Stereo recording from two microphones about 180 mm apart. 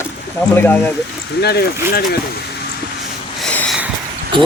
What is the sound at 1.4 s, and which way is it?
Speech, 60° left (ahead or behind).